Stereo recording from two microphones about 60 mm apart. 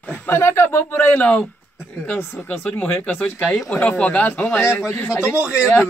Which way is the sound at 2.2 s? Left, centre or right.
Left.